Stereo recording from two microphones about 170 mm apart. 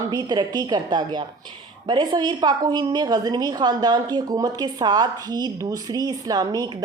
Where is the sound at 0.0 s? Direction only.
25° right (ahead or behind).